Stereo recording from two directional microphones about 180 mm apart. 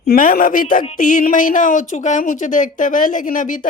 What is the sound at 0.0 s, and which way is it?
Speech, 55° left (ahead or behind).